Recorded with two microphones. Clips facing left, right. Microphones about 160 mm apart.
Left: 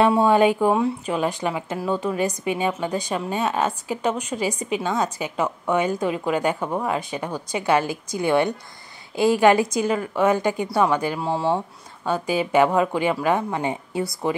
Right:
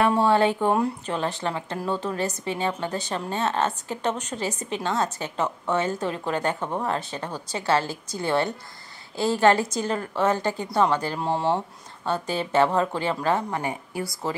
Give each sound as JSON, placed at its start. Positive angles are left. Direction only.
{"t": 0.1, "sound": "a woman's voice", "side_deg": 15}